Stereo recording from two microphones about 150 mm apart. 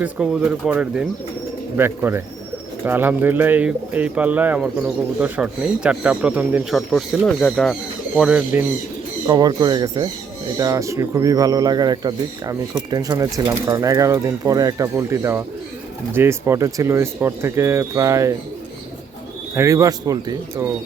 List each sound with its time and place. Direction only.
0.0 s speech: 5° right (ahead or behind)
9.2 s speech: 25° right (ahead or behind)
19.5 s speech: 20° right (ahead or behind)